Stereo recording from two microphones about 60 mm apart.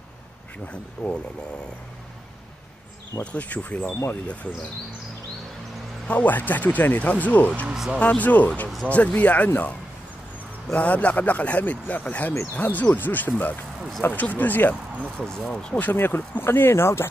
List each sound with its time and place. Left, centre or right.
0.7 s speech: left
3.3 s speech: left
6.0 s speech: left
7.6 s speech: centre
8.0 s speech: left
15.3 s speech: centre
15.9 s speech: left